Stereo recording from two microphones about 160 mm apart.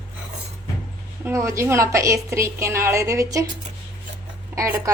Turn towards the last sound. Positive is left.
turn(degrees=-20)  # may be behind; listen again after turning